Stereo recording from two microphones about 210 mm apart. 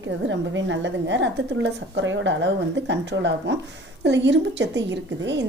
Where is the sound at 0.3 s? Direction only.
60° right (ahead or behind).